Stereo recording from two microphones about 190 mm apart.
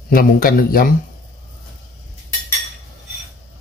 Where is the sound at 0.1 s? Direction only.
50° left (ahead or behind).